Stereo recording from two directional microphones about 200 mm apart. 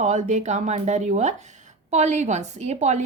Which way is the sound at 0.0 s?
35° right (ahead or behind).